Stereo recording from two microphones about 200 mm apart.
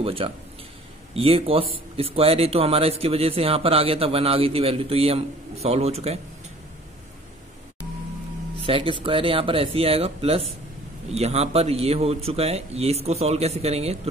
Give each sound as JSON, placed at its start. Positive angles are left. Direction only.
{"t": 0.0, "sound": "a man's voice", "side_deg": -30}
{"t": 8.6, "sound": "a man's voice", "side_deg": -25}